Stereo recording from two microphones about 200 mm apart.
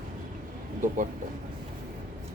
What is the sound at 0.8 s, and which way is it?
Speech, 40° right (ahead or behind).